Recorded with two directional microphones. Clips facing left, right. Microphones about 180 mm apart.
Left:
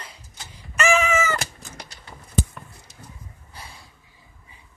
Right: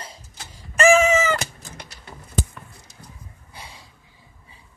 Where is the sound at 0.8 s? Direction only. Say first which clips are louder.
Right 6 dB; 45° right (ahead or behind).